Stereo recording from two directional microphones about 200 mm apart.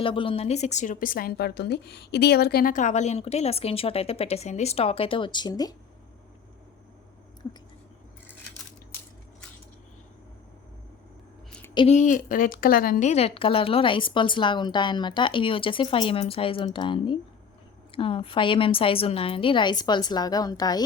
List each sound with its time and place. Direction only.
0.0 s a woman's voice: 25° left (ahead or behind)
11.7 s speech: 25° left (ahead or behind)
11.9 s a woman's voice: 40° left (ahead or behind); by 20.8 s 20° left (ahead or behind)